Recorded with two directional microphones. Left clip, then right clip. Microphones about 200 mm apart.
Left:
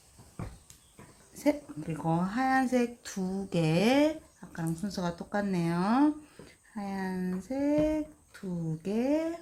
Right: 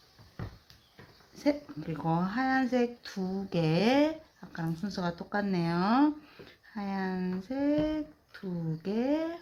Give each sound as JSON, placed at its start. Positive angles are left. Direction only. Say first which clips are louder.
{"t": 1.4, "sound": "a woman's voice", "louder": "left 1 dB", "side_deg": -5}